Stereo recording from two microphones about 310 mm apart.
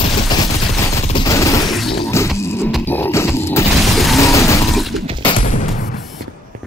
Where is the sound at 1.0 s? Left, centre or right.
Centre.